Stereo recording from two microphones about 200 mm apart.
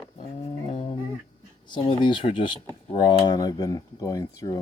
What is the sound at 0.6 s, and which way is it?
Music, 30° left (ahead or behind).